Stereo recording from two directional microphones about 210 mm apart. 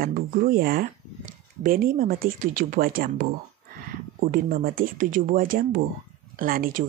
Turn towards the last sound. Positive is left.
turn(degrees=-45)  # may be behind; listen again after turning